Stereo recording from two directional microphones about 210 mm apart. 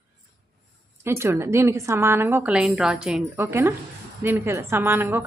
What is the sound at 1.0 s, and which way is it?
A woman's voice, 10° right (ahead or behind).